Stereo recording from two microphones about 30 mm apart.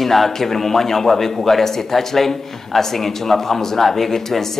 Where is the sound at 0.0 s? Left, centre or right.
Centre.